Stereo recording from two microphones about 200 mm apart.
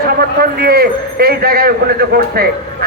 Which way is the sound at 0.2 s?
50° right (ahead or behind).